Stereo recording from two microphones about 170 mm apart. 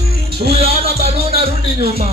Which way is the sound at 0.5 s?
35° right (ahead or behind).